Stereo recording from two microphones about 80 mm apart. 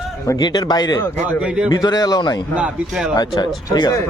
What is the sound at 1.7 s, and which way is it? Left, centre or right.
Speech, left.